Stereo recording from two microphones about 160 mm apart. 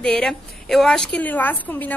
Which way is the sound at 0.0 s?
5° left (ahead or behind).